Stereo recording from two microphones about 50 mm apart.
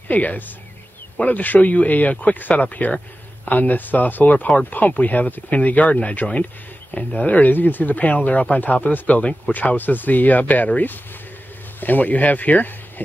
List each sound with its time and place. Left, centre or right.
0.1 s speech: left
9.5 s speech: left